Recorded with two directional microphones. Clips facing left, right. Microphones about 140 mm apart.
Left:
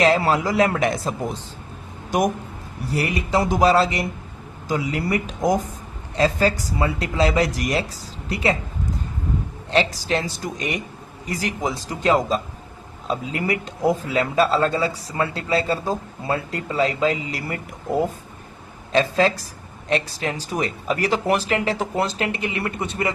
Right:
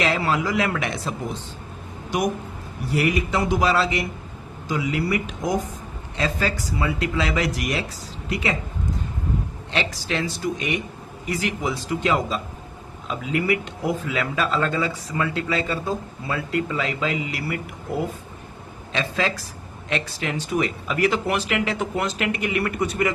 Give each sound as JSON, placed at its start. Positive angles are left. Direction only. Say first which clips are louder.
{"t": 0.0, "sound": "speech", "louder": "left 4 dB", "side_deg": 40}
{"t": 2.8, "sound": "speech", "louder": "right 2 dB", "side_deg": 35}
{"t": 9.7, "sound": "speech", "louder": "left 5 dB", "side_deg": 40}